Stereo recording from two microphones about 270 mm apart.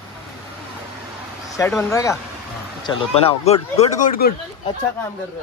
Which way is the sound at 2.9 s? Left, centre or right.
Left.